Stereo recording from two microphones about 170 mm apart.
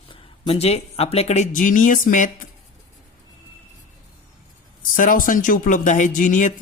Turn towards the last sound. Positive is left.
turn(degrees=50)  # may be behind; listen again after turning